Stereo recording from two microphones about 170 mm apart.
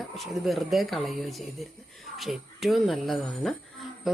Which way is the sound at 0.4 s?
Centre (ahead or behind).